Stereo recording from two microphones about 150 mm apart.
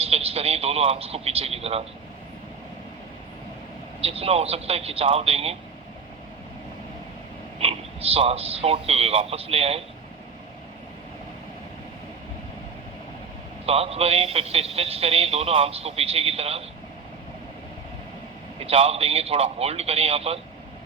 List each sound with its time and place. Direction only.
0.0 s a man's voice: 40° right (ahead or behind)
4.0 s a man's voice: 40° right (ahead or behind)
7.6 s a man's voice: 40° right (ahead or behind)
13.7 s speech: 40° right (ahead or behind)
18.6 s speech: 40° right (ahead or behind)